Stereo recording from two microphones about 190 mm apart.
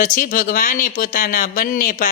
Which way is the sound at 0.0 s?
45° left (ahead or behind).